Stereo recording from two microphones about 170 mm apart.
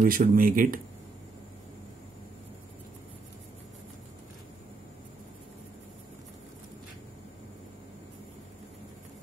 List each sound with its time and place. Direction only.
0.0 s speech: 60° right (ahead or behind)